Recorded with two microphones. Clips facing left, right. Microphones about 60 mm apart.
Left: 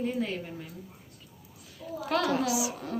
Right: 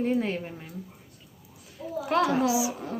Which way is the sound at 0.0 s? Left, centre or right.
Right.